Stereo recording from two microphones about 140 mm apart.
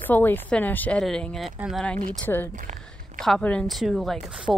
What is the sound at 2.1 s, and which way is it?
Speech, 10° left (ahead or behind).